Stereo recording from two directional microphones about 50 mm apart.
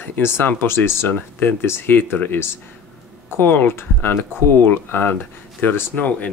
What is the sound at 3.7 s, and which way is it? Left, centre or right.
Speech, left.